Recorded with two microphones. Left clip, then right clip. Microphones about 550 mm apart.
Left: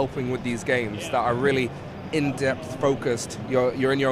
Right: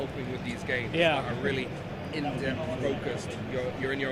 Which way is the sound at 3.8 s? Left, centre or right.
Left.